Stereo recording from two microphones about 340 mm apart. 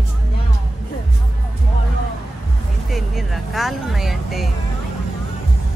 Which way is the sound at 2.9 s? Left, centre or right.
Centre.